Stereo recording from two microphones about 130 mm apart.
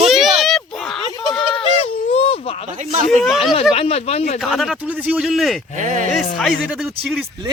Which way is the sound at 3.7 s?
50° left (ahead or behind).